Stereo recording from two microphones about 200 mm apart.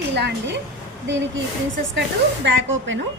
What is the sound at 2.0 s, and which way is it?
A woman's voice, 65° right (ahead or behind).